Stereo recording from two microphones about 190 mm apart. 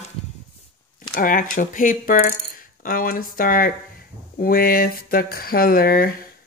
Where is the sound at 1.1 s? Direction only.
45° left (ahead or behind).